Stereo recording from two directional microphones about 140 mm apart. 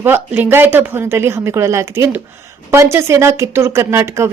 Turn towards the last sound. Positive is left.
turn(degrees=-20)  # may be behind; listen again after turning